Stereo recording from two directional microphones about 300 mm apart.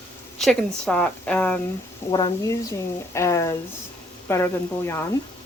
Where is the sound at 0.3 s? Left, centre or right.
Centre.